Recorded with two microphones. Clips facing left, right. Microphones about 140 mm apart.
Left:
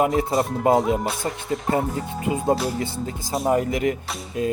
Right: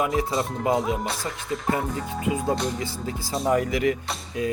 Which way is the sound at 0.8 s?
Centre (ahead or behind).